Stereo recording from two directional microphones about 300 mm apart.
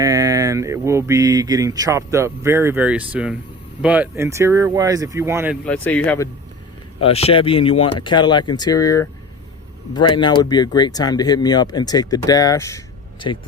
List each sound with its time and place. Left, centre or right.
0.0 s speech: centre
5.6 s speech: centre
7.0 s speech: centre